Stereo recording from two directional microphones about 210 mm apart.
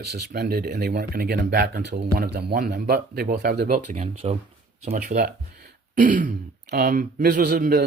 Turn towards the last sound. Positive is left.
turn(degrees=-45)  # may be behind; listen again after turning